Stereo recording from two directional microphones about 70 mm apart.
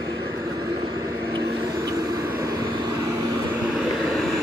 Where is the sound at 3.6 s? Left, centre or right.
Centre.